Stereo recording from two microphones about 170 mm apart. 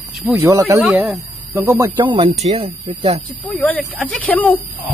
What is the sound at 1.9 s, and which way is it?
Speech, 30° right (ahead or behind).